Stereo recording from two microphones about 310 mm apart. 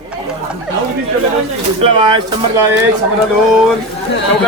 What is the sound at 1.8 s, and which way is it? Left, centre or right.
Speech, centre.